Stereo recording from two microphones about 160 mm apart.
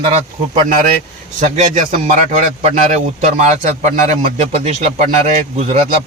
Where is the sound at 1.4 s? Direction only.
50° right (ahead or behind).